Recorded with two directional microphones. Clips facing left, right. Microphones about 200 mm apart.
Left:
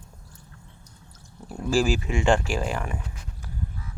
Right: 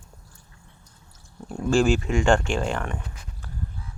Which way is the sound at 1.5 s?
5° left (ahead or behind).